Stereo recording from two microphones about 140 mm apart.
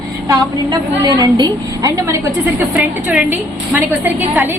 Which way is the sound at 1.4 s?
25° right (ahead or behind).